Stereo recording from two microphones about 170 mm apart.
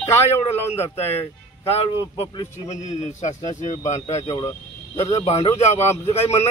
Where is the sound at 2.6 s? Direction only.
45° left (ahead or behind).